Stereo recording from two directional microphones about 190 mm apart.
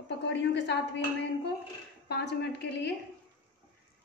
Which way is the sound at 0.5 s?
65° left (ahead or behind).